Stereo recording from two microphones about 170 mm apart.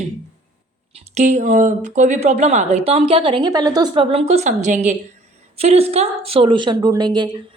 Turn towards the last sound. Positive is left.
turn(degrees=-25)  # may be behind; listen again after turning